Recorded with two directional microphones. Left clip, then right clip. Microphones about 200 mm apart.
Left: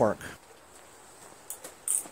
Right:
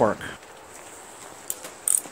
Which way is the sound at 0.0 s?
20° left (ahead or behind).